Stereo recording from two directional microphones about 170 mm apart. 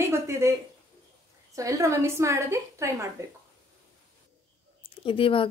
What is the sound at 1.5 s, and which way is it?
A woman's voice, 20° right (ahead or behind).